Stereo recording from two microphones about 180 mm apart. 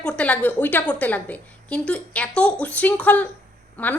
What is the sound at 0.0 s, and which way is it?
A woman's voice, 5° left (ahead or behind).